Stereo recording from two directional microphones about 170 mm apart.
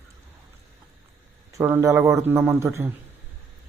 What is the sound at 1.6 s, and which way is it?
A man's voice, 15° right (ahead or behind).